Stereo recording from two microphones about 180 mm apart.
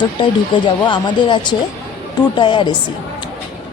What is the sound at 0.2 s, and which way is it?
A woman's voice, 25° left (ahead or behind).